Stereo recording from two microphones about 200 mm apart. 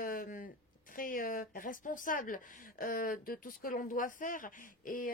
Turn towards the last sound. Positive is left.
turn(degrees=45)  # may be behind; listen again after turning